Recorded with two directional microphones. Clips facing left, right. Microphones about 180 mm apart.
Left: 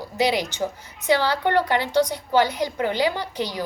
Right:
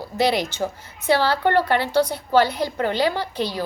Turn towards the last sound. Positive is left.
turn(degrees=15)  # may be behind; listen again after turning